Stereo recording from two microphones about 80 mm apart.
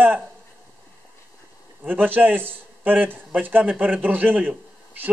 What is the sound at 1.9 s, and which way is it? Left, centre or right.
A man's voice, right.